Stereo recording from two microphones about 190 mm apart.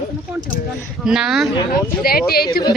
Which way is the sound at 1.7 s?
50° left (ahead or behind).